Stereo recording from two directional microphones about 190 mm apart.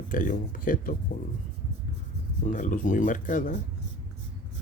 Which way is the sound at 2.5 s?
45° left (ahead or behind).